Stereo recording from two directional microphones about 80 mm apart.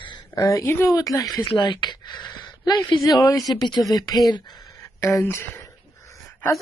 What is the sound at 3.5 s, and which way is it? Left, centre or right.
Speech, left.